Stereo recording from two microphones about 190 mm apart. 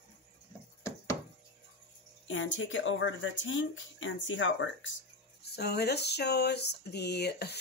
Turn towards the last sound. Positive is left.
turn(degrees=60)  # may be behind; listen again after turning